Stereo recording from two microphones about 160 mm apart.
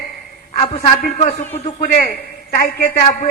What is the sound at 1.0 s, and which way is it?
A man's voice, 50° left (ahead or behind).